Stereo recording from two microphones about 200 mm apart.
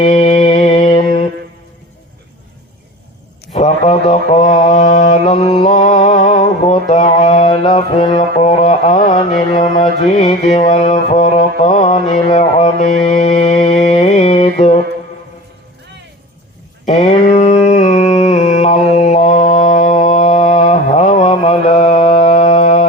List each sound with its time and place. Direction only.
0.0 s music: 35° left (ahead or behind)
3.5 s mantra: 35° left (ahead or behind)
16.8 s a sound: 35° left (ahead or behind)
21.2 s mantra: 25° left (ahead or behind)
21.9 s music: 25° left (ahead or behind)